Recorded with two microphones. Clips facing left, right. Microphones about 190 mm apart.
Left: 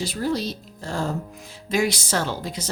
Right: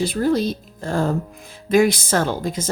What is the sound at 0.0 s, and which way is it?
Speech, 55° right (ahead or behind).